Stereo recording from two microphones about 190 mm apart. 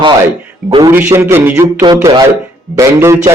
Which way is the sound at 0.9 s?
10° right (ahead or behind).